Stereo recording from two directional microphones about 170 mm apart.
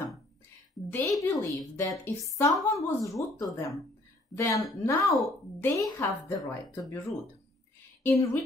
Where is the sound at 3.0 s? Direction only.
20° left (ahead or behind).